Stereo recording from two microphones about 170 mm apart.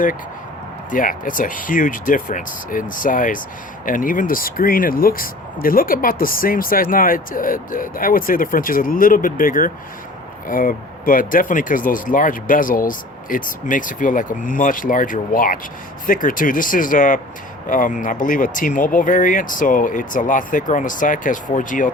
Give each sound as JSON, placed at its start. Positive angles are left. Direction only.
{"t": 0.9, "sound": "speech", "side_deg": 50}